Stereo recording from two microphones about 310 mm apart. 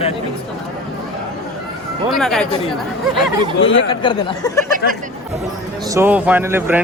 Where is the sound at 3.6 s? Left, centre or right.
Left.